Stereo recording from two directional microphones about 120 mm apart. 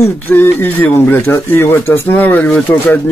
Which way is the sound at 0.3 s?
15° left (ahead or behind).